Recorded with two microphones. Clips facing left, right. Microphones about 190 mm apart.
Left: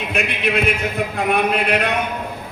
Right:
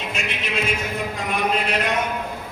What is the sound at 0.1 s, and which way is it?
A man's voice, 60° left (ahead or behind).